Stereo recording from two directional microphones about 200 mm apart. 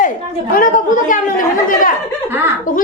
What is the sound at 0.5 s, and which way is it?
Speech, 45° left (ahead or behind).